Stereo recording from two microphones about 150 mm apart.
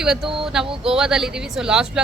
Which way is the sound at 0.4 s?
5° right (ahead or behind).